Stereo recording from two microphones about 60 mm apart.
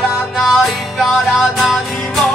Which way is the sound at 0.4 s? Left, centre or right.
Centre.